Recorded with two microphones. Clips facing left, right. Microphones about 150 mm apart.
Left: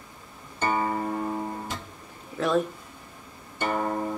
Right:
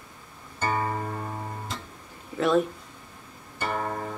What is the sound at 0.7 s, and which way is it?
Music, 15° left (ahead or behind).